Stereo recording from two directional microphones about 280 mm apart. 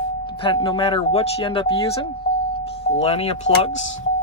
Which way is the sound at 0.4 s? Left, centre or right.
Centre.